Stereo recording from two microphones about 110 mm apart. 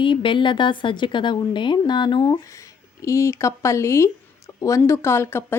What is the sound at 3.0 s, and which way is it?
Speech, 25° left (ahead or behind).